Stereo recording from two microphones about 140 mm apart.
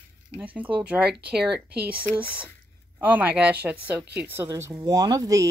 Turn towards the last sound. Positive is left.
turn(degrees=-25)  # may be behind; listen again after turning